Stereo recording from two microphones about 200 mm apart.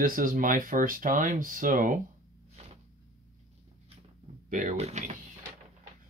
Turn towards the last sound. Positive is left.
turn(degrees=-35)  # may be behind; listen again after turning